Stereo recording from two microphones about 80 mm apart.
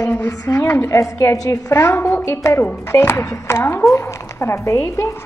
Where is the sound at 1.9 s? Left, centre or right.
Left.